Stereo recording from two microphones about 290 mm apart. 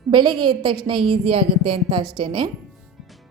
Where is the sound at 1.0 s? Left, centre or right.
Right.